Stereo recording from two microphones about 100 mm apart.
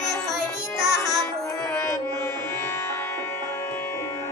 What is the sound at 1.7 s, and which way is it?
Music, 30° left (ahead or behind).